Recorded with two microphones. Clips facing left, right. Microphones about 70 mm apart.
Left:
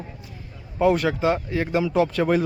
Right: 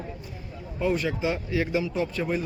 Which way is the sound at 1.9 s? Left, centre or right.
Left.